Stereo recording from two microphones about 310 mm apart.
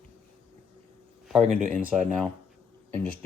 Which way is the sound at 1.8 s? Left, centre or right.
Centre.